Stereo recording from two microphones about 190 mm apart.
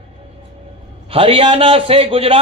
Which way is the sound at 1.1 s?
30° right (ahead or behind).